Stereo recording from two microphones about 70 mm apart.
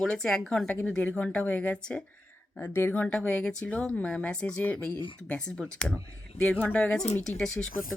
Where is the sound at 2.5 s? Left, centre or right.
Left.